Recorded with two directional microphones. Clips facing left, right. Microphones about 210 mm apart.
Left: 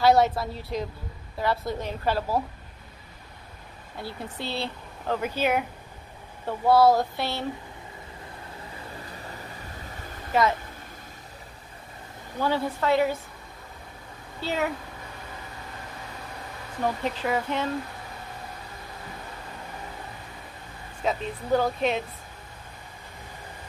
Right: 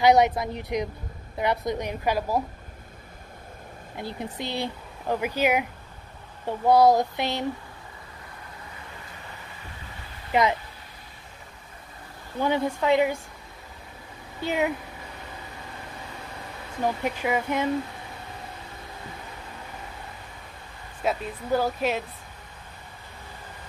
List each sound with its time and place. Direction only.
0.0 s speech: 15° right (ahead or behind)
3.9 s speech: 20° right (ahead or behind)
12.4 s speech: 20° right (ahead or behind)
14.4 s speech: 15° right (ahead or behind)
16.8 s speech: 10° right (ahead or behind)
21.0 s speech: 5° right (ahead or behind)